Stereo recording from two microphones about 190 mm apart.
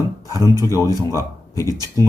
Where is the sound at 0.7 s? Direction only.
15° left (ahead or behind).